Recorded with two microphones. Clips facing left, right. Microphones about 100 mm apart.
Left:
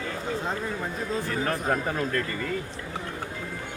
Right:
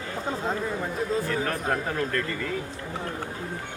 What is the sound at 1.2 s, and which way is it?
Speech, centre (ahead or behind).